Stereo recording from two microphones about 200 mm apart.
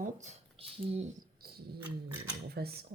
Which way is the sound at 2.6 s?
50° right (ahead or behind).